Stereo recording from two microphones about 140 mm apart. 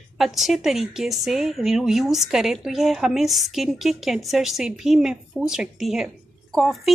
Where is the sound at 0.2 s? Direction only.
Centre (ahead or behind).